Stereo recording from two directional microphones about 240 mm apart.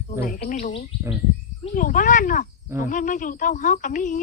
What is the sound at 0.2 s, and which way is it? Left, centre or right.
Speech, left.